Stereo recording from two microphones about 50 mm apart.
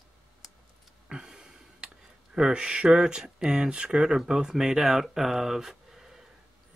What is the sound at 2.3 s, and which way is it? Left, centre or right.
Speech, centre.